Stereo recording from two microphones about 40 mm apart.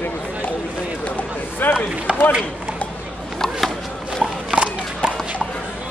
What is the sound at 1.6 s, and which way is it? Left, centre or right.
Chop, left.